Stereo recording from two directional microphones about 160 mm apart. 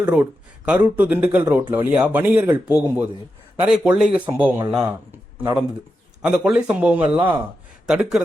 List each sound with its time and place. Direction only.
0.0 s speech: 10° right (ahead or behind)
5.1 s a sound: 10° right (ahead or behind)
6.2 s speech: 5° right (ahead or behind)